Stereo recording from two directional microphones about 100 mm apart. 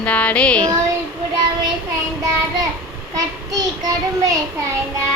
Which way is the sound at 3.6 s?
40° right (ahead or behind).